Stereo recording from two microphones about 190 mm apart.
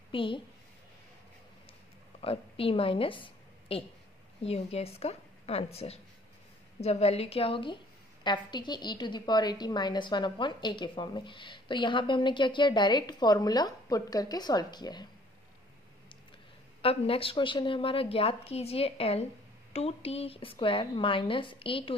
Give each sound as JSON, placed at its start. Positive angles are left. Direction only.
{"t": 0.1, "sound": "a woman's voice", "side_deg": 25}
{"t": 2.2, "sound": "a woman's voice", "side_deg": 30}
{"t": 16.8, "sound": "a woman's voice", "side_deg": 30}